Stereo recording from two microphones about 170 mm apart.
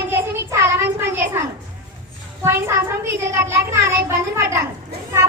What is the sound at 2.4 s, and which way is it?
Child singing, 15° right (ahead or behind).